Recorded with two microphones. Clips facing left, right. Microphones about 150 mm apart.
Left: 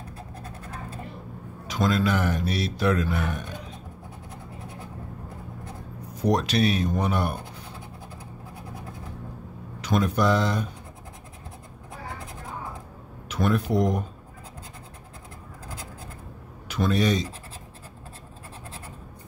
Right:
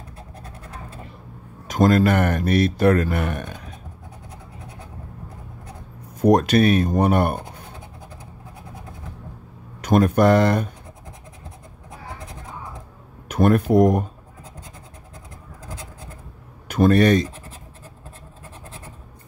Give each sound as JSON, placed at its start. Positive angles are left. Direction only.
{"t": 1.7, "sound": "speech", "side_deg": -50}
{"t": 6.2, "sound": "speech", "side_deg": -55}
{"t": 9.8, "sound": "speech", "side_deg": -55}
{"t": 13.3, "sound": "speech", "side_deg": -50}
{"t": 16.6, "sound": "speech", "side_deg": -50}